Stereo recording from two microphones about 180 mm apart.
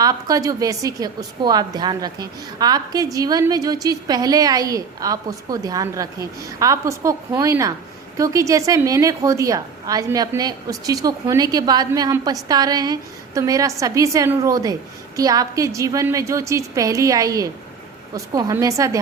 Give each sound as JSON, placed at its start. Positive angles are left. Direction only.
{"t": 0.0, "sound": "a woman's voice", "side_deg": -20}